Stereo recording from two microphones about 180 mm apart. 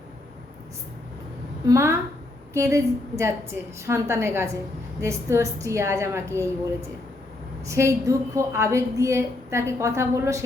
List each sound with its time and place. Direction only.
1.6 s a woman's voice: 15° right (ahead or behind)
7.7 s a woman's voice: 15° right (ahead or behind)